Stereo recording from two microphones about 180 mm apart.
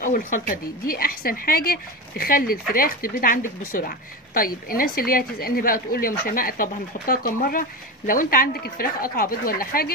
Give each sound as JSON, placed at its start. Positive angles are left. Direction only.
{"t": 0.0, "sound": "a woman's voice", "side_deg": 50}